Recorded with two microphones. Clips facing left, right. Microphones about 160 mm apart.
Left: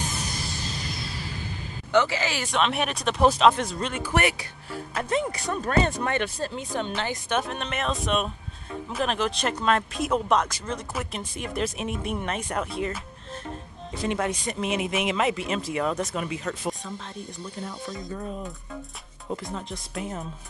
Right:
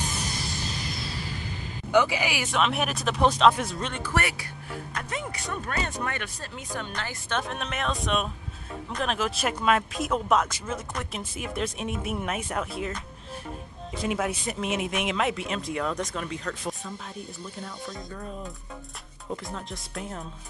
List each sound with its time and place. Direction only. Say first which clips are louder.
1.9 s speech: even; 10° right (ahead or behind)
4.0 s speech: left 5 dB; 20° left (ahead or behind)
4.9 s speech: left 9 dB; 35° left (ahead or behind)
7.0 s a woman's voice: left 3 dB; 15° left (ahead or behind)
7.4 s speech: left 1 dB; centre (ahead or behind)
14.0 s speech: left 1 dB; 5° right (ahead or behind)